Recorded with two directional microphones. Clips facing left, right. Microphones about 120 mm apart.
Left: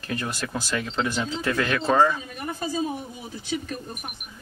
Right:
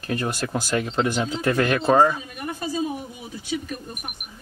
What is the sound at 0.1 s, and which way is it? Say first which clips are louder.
Speech: right 4 dB; 40° right (ahead or behind).